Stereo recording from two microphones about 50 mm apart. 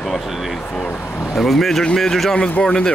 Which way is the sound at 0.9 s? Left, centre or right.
Left.